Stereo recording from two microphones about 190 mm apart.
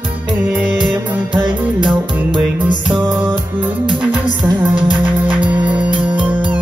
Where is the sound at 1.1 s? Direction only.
25° right (ahead or behind).